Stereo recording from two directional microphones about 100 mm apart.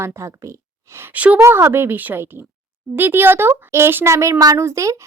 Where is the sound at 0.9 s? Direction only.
20° right (ahead or behind).